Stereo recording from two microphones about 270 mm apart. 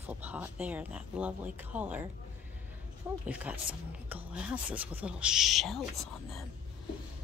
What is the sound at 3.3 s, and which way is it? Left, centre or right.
Speech, centre.